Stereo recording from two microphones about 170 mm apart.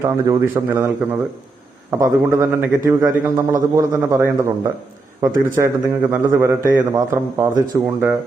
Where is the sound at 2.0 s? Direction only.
15° right (ahead or behind).